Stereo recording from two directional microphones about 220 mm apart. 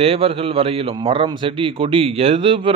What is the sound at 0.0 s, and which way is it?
A man's voice, 25° right (ahead or behind).